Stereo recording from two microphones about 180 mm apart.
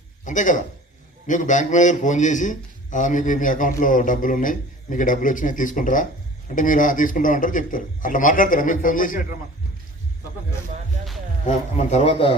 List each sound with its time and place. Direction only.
0.3 s a man's voice: 45° left (ahead or behind)
11.4 s a man's voice: 40° left (ahead or behind)